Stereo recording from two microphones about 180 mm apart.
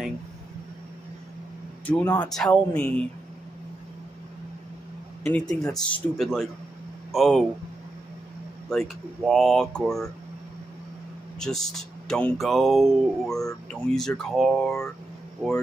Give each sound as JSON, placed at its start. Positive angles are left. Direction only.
{"t": 1.9, "sound": "speech", "side_deg": 10}
{"t": 5.2, "sound": "speech", "side_deg": 10}
{"t": 8.6, "sound": "speech", "side_deg": 0}
{"t": 11.3, "sound": "speech", "side_deg": 5}